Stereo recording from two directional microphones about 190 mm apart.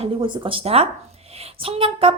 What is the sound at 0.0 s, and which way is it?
A woman's voice, 25° right (ahead or behind).